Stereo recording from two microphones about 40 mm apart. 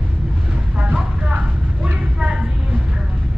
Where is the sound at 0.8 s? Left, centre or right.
Right.